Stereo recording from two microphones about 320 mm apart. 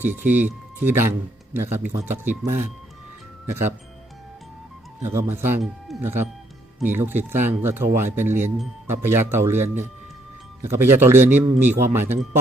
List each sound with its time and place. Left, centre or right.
0.0 s speech: centre
5.0 s speech: centre